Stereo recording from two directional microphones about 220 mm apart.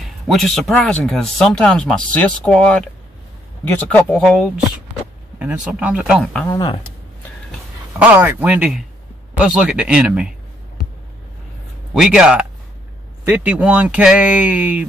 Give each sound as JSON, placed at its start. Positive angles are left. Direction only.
{"t": 0.3, "sound": "speech", "side_deg": 0}
{"t": 3.9, "sound": "speech", "side_deg": 5}
{"t": 6.5, "sound": "speech", "side_deg": 20}
{"t": 8.0, "sound": "speech", "side_deg": -5}
{"t": 11.9, "sound": "speech", "side_deg": -5}